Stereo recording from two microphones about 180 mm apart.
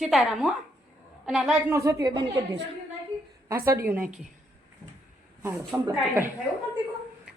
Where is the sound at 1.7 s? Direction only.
15° right (ahead or behind).